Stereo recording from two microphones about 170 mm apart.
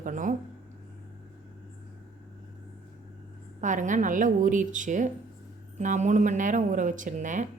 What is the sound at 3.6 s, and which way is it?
Speech, 50° right (ahead or behind).